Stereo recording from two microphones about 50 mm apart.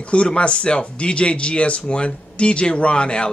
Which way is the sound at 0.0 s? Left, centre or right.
Left.